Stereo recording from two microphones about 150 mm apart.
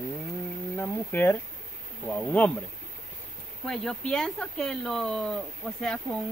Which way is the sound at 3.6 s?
5° left (ahead or behind).